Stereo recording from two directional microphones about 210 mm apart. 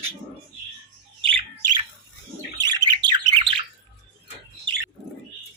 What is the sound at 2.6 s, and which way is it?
Bird, 20° right (ahead or behind).